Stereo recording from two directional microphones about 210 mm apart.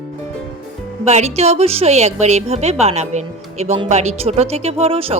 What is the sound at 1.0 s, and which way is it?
A woman's voice, 30° right (ahead or behind).